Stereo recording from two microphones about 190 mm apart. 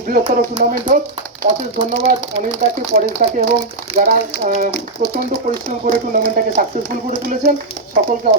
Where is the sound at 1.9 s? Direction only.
50° right (ahead or behind).